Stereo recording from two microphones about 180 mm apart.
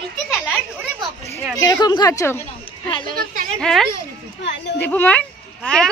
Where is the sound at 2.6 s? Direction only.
30° left (ahead or behind).